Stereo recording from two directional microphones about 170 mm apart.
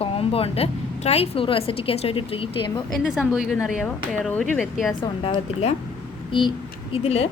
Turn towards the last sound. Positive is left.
turn(degrees=35)  # may be behind; listen again after turning